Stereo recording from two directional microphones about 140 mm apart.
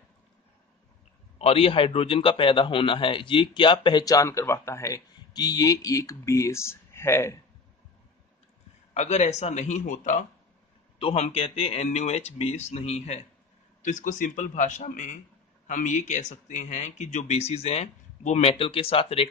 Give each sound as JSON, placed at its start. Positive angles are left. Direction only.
{"t": 1.4, "sound": "a man's voice", "side_deg": 45}
{"t": 8.9, "sound": "speech", "side_deg": 55}
{"t": 11.0, "sound": "speech", "side_deg": 50}
{"t": 13.8, "sound": "speech", "side_deg": 65}